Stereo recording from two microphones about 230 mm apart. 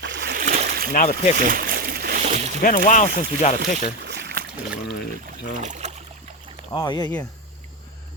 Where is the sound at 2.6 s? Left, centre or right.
Left.